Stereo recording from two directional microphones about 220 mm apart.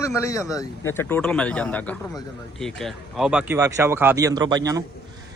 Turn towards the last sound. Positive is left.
turn(degrees=-15)  # may be behind; listen again after turning